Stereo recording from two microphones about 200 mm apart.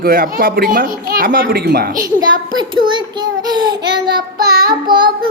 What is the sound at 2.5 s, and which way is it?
A child's voice, 25° right (ahead or behind).